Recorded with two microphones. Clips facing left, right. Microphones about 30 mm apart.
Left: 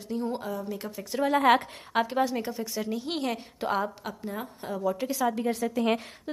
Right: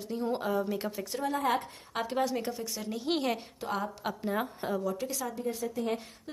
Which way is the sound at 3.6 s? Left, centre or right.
Left.